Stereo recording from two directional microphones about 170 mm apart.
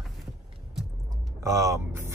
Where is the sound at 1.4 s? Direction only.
20° right (ahead or behind).